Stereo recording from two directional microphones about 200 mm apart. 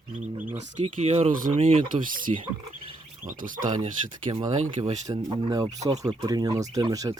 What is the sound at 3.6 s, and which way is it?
Speech, 20° right (ahead or behind).